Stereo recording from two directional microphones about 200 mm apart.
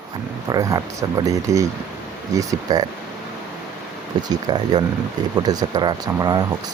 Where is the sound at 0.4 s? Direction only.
15° right (ahead or behind).